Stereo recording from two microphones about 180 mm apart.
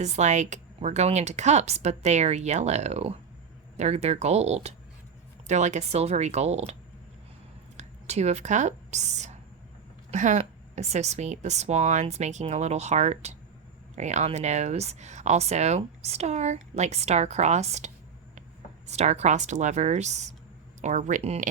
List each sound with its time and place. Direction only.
0.0 s speech: 40° right (ahead or behind)
7.8 s speech: 35° right (ahead or behind)